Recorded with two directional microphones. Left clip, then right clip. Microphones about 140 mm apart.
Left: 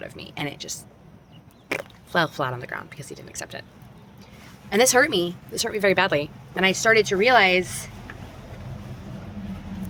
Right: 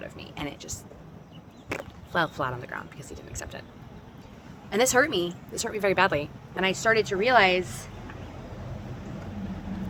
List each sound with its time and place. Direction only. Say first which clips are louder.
0.0 s speech: left 4 dB; 45° left (ahead or behind)
4.7 s speech: left 4 dB; 55° left (ahead or behind)